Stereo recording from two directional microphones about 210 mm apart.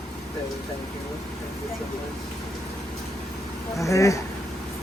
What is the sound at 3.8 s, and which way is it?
Speech, 15° left (ahead or behind).